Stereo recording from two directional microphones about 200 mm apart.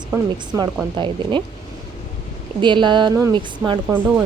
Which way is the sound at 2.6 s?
25° right (ahead or behind).